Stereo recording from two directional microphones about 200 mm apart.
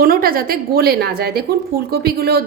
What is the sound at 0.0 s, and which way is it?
A woman's voice, 45° right (ahead or behind).